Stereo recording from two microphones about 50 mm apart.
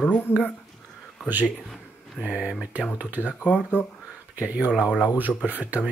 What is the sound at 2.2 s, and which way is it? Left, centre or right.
Speech, right.